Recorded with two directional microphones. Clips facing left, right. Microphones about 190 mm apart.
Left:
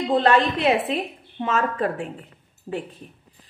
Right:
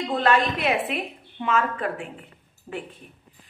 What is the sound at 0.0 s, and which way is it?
A woman's voice, 35° left (ahead or behind).